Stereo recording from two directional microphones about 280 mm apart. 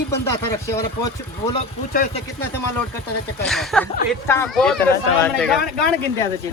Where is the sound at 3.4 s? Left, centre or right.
Centre.